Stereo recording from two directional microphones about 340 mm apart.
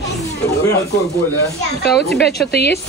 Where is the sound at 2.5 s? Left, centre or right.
Left.